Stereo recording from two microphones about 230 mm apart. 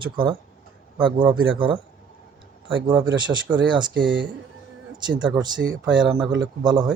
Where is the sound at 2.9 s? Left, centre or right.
Centre.